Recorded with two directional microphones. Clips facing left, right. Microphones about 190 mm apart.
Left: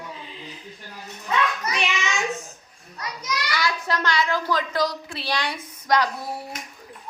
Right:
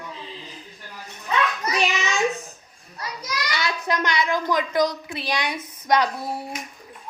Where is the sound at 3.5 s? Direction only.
20° right (ahead or behind).